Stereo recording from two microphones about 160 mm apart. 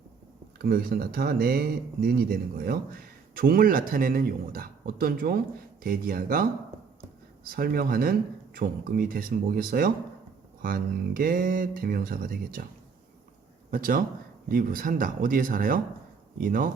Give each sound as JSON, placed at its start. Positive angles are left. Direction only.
{"t": 0.6, "sound": "speech", "side_deg": -65}
{"t": 7.5, "sound": "speech", "side_deg": -65}
{"t": 13.7, "sound": "speech", "side_deg": -60}